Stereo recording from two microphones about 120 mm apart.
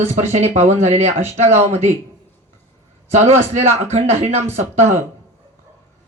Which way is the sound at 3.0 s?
60° right (ahead or behind).